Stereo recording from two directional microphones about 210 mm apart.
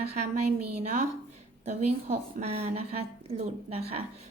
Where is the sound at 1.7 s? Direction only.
35° right (ahead or behind).